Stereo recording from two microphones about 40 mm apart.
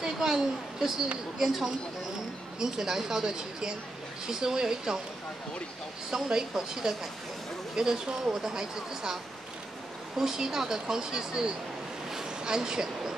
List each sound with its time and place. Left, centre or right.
0.0 s a woman's voice: centre
6.0 s speech: centre
12.1 s a sound: centre